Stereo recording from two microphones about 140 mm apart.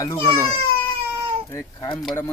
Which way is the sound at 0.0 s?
20° left (ahead or behind).